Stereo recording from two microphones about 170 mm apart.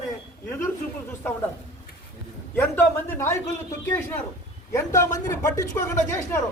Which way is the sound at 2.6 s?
15° left (ahead or behind).